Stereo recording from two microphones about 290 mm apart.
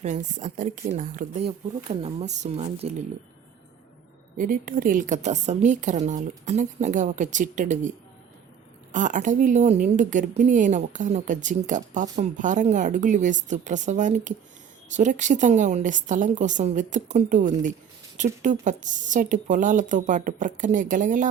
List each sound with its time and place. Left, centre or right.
0.0 s a woman's voice: right
4.4 s a woman's voice: right